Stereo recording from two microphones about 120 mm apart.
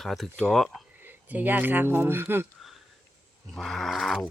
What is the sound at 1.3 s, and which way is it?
Speech, 15° right (ahead or behind).